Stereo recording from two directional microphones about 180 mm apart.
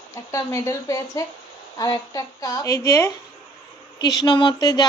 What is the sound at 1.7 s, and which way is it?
A woman's voice, 20° left (ahead or behind).